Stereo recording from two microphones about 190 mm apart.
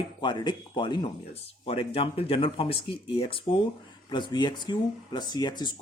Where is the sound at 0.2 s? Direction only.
25° left (ahead or behind).